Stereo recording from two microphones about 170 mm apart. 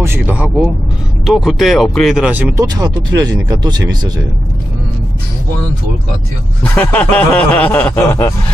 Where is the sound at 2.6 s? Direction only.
25° right (ahead or behind).